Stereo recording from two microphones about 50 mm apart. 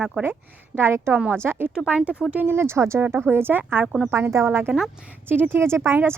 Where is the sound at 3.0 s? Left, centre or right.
Right.